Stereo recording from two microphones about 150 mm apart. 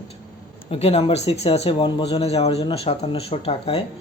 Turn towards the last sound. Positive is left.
turn(degrees=40)  # may be behind; listen again after turning